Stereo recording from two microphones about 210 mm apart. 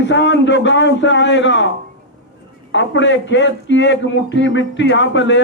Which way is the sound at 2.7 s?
60° left (ahead or behind).